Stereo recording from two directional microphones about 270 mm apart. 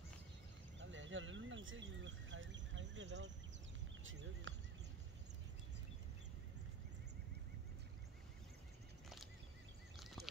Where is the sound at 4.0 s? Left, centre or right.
Right.